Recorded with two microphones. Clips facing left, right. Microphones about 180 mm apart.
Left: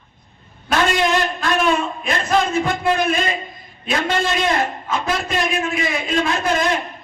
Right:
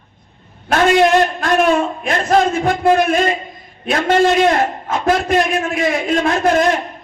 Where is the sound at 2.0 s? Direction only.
50° right (ahead or behind).